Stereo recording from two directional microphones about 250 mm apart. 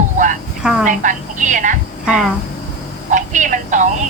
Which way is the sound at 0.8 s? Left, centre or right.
Right.